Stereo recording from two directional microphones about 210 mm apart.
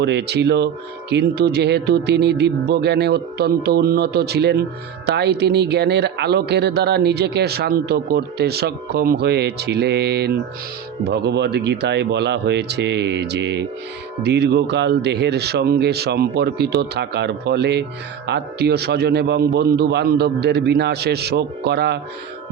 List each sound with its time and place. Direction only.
0.0 s speech: 55° right (ahead or behind)